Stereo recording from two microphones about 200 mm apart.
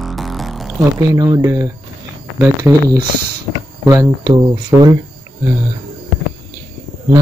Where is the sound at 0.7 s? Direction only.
15° right (ahead or behind).